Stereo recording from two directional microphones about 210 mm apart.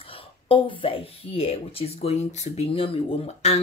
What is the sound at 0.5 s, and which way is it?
Speech, 25° left (ahead or behind).